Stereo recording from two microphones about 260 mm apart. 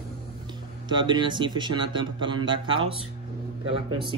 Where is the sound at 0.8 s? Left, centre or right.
Centre.